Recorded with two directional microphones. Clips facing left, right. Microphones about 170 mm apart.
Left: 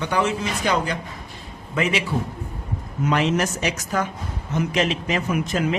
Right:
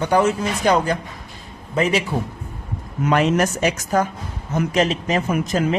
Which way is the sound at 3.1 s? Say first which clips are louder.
Right 4 dB; 50° right (ahead or behind).